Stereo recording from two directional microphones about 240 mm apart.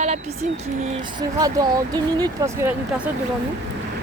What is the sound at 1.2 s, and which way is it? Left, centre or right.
Speech, centre.